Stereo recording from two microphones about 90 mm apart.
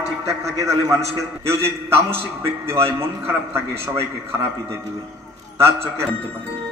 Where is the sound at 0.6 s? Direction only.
35° right (ahead or behind).